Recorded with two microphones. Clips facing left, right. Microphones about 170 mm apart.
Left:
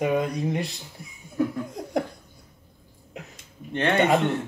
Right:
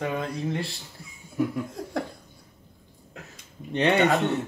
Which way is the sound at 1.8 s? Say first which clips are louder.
Even; 20° left (ahead or behind).